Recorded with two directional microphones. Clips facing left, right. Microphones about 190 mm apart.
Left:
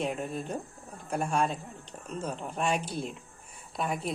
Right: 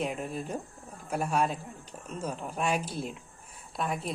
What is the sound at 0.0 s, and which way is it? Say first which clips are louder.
A woman's voice: left 1 dB; centre (ahead or behind).